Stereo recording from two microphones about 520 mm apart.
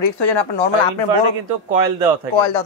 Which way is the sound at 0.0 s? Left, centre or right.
Left.